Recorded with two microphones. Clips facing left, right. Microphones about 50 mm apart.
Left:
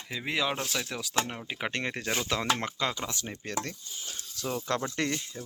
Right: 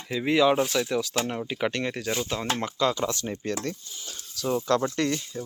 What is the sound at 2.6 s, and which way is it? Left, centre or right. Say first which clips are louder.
Speech: right 4 dB; left.